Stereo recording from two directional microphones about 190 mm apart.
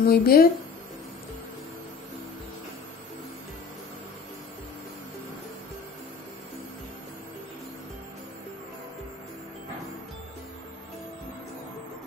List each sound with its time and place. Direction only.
0.0 s speech: 50° left (ahead or behind)